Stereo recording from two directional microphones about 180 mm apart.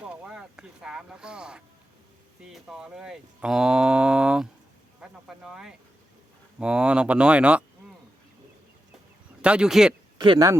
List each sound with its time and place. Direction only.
0.0 s speech: 5° right (ahead or behind)
9.4 s speech: 5° right (ahead or behind)
10.2 s speech: 20° right (ahead or behind)